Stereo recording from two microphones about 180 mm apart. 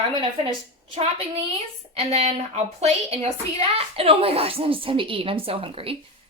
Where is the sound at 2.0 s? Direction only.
35° right (ahead or behind).